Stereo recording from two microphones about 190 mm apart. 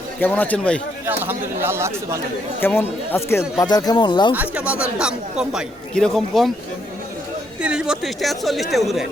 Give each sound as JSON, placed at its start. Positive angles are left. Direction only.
{"t": 0.2, "sound": "speech", "side_deg": 10}
{"t": 1.0, "sound": "speech", "side_deg": -10}
{"t": 2.6, "sound": "speech", "side_deg": 10}
{"t": 4.4, "sound": "speech", "side_deg": -5}
{"t": 7.6, "sound": "speech", "side_deg": -5}